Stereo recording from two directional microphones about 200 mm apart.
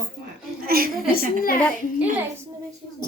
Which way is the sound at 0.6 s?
50° right (ahead or behind).